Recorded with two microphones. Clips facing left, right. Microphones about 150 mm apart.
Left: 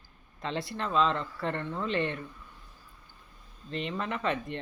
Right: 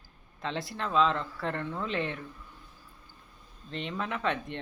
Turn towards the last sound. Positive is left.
turn(degrees=0)  # may be behind; listen again after turning